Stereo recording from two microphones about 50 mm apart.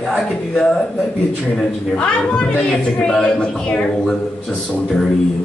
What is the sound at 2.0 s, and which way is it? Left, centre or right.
A woman's voice, centre.